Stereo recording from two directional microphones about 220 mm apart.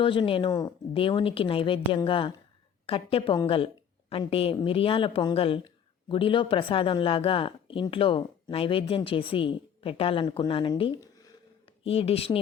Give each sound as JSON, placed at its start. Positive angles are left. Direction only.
{"t": 0.0, "sound": "speech", "side_deg": 25}